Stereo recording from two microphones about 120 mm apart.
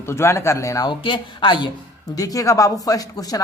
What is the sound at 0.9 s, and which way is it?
Speech, 40° left (ahead or behind).